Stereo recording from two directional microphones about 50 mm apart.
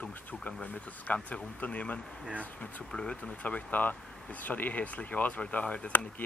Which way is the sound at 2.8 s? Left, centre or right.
Centre.